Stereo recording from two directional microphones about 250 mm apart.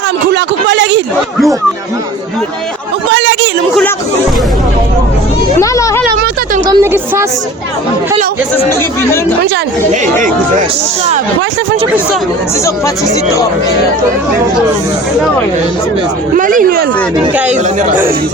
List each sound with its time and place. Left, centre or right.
0.3 s speech: right
3.1 s a sound: right
5.5 s a sound: centre
6.7 s a woman's voice: centre
9.9 s speech: right
16.3 s speech: right